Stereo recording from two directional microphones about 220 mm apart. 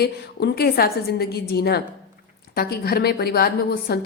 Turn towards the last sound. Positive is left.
turn(degrees=45)  # may be behind; listen again after turning